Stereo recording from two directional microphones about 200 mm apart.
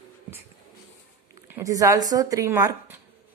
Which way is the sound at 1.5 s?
15° right (ahead or behind).